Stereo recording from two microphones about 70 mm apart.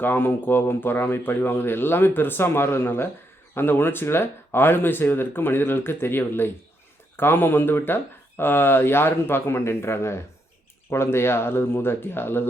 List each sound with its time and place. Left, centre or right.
0.0 s speech: left